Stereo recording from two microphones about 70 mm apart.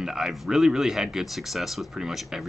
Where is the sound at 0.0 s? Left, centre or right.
Centre.